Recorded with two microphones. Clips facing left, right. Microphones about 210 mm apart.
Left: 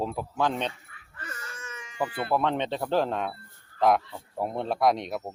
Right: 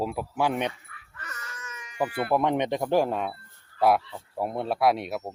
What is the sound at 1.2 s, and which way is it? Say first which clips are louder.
Wail: left 2 dB; 30° left (ahead or behind).